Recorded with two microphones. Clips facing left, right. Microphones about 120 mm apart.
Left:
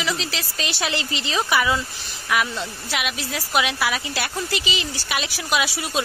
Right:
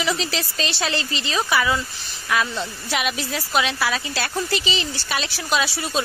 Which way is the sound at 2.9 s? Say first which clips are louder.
Right 3 dB; centre (ahead or behind).